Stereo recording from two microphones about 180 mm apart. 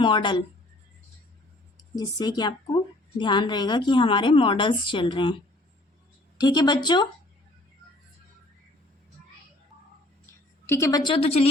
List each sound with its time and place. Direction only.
0.0 s a woman's voice: 25° left (ahead or behind)
2.0 s a woman's voice: 20° left (ahead or behind)
10.7 s a woman's voice: 15° left (ahead or behind); by 11.4 s 35° left (ahead or behind)